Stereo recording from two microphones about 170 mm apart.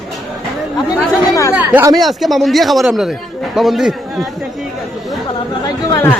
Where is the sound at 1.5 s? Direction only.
10° right (ahead or behind).